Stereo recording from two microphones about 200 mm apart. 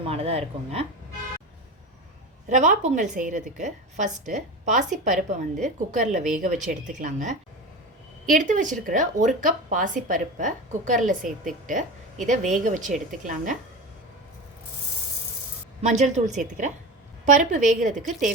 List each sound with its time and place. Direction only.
0.0 s speech: 30° right (ahead or behind)
2.5 s a woman's voice: 40° right (ahead or behind)
15.8 s a woman's voice: 35° right (ahead or behind)